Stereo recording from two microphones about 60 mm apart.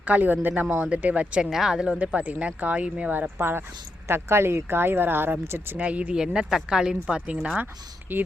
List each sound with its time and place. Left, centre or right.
0.0 s speech: right
1.5 s speech: centre
2.0 s speech: right
3.2 s speech: right
5.7 s speech: right
6.1 s speech: centre
8.1 s speech: right